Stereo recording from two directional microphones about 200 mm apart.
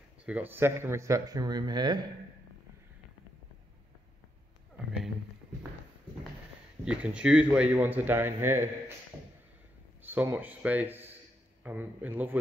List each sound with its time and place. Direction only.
0.2 s a man's voice: 5° right (ahead or behind)
6.8 s a man's voice: 5° right (ahead or behind)
10.0 s a man's voice: 10° right (ahead or behind)